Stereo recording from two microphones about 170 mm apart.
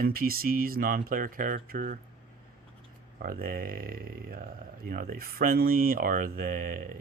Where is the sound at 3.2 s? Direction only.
60° right (ahead or behind).